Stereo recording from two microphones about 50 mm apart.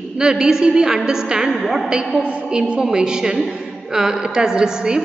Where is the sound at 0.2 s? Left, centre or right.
Centre.